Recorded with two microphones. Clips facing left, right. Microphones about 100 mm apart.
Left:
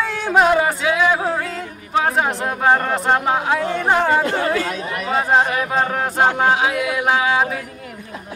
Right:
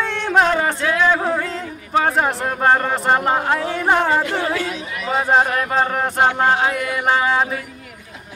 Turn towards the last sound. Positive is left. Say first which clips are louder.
# even
turn(degrees=5)  # may be behind; listen again after turning